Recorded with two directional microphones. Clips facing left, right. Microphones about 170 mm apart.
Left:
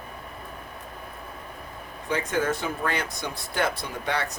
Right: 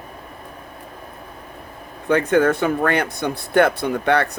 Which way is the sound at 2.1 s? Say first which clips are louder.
Right 10 dB; 60° right (ahead or behind).